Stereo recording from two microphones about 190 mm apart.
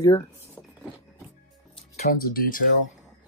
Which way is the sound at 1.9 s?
40° left (ahead or behind).